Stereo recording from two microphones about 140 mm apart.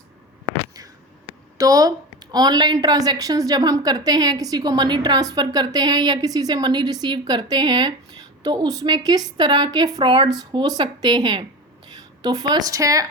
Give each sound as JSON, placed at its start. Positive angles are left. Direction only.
{"t": 1.5, "sound": "a woman's voice", "side_deg": -25}